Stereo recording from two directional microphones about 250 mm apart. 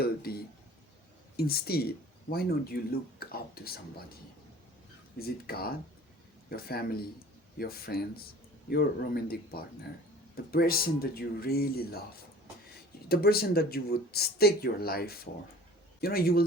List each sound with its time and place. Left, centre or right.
0.0 s chink: left
1.4 s speech: left
5.2 s speech: left
13.1 s speech: left